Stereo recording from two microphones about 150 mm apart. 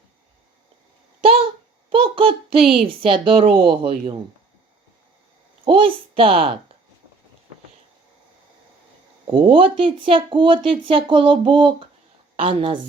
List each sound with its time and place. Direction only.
1.2 s a sound: 40° right (ahead or behind)
1.9 s child singing: 35° right (ahead or behind)
3.0 s speech: 35° right (ahead or behind)
5.6 s speech: 35° right (ahead or behind)
9.2 s speech: 35° right (ahead or behind)